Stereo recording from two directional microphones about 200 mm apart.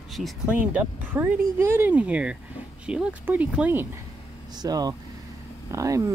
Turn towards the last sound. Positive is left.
turn(degrees=-15)  # may be behind; listen again after turning